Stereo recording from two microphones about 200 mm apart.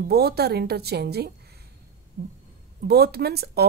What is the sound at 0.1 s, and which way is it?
Speech, 50° right (ahead or behind).